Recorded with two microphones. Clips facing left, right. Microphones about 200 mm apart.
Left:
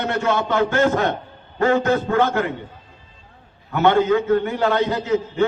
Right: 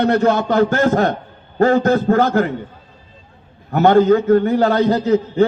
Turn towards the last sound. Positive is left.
turn(degrees=-35)  # may be behind; listen again after turning